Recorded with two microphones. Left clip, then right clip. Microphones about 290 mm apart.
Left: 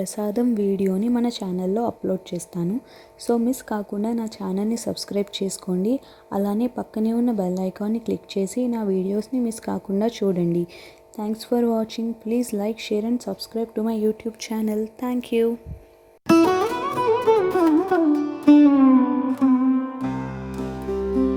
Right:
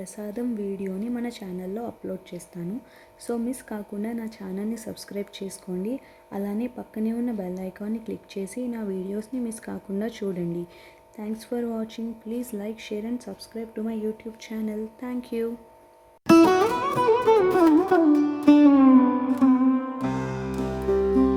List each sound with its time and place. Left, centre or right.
0.0 s a woman's voice: left
16.2 s music: centre